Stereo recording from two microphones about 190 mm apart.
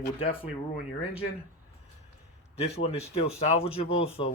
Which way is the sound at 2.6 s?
35° left (ahead or behind).